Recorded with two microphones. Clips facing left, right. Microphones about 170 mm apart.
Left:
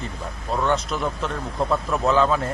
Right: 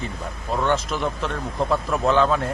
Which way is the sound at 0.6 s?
Centre (ahead or behind).